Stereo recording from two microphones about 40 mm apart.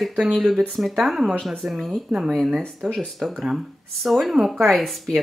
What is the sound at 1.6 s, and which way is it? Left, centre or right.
Speech, right.